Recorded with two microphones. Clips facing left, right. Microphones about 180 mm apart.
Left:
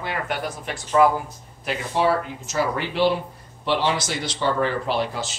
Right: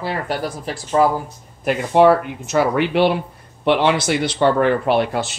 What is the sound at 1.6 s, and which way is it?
Speech, 55° right (ahead or behind).